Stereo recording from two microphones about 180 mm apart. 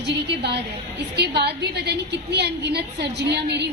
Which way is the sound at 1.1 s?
65° right (ahead or behind).